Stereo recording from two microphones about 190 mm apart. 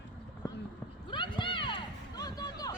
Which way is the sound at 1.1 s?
25° left (ahead or behind).